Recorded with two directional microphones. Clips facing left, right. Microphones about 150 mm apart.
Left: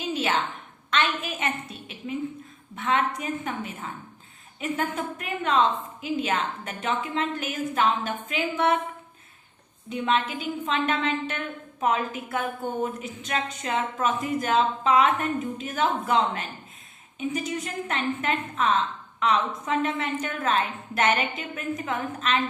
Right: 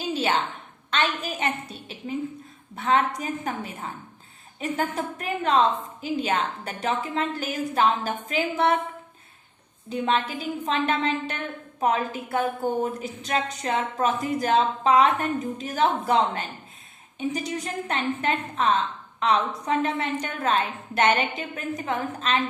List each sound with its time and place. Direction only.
0.0 s a sound: 30° right (ahead or behind)
0.9 s a woman's voice: 35° right (ahead or behind)
9.9 s a woman's voice: 35° right (ahead or behind)